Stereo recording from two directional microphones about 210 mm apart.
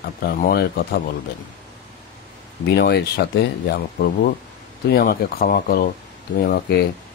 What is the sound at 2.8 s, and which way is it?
Speech, 50° left (ahead or behind).